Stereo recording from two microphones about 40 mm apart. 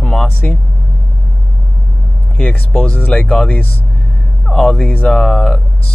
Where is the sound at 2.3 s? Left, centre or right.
Left.